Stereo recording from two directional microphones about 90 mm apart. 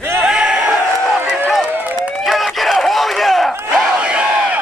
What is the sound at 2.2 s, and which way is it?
Run, centre (ahead or behind).